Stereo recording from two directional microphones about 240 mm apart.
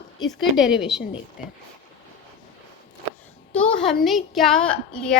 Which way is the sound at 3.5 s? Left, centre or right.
Centre.